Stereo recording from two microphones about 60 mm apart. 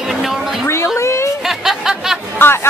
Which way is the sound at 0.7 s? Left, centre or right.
Left.